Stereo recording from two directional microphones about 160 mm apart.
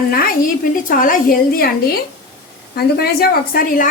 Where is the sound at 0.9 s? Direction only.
60° left (ahead or behind).